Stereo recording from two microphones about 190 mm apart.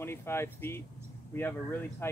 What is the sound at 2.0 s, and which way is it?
Speech, 10° left (ahead or behind).